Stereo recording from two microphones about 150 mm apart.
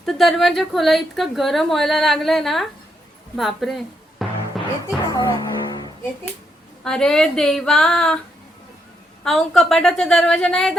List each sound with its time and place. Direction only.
0.0 s a woman's voice: centre (ahead or behind)
3.3 s music: centre (ahead or behind)
5.1 s music: 25° left (ahead or behind)
6.8 s a woman's voice: 5° left (ahead or behind)
9.2 s a woman's voice: centre (ahead or behind)